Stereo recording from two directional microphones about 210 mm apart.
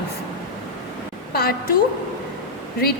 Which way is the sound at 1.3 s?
45° left (ahead or behind).